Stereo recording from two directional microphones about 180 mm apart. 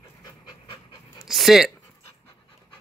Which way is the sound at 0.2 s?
25° left (ahead or behind).